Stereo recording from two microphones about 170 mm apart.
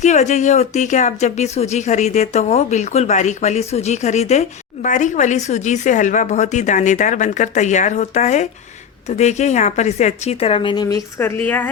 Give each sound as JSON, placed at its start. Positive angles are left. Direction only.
{"t": 0.0, "sound": "speech", "side_deg": 45}